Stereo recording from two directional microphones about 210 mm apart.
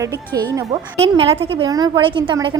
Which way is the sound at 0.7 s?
30° right (ahead or behind).